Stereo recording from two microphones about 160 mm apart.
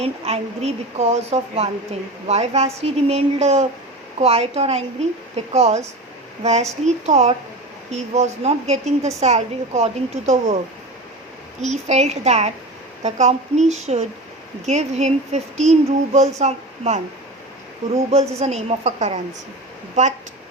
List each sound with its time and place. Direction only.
0.0 s a woman's voice: 40° right (ahead or behind)
11.6 s a woman's voice: 45° right (ahead or behind)
18.3 s a woman's voice: 40° right (ahead or behind)